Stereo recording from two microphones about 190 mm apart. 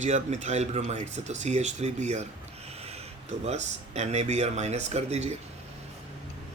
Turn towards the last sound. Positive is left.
turn(degrees=-35)  # may be behind; listen again after turning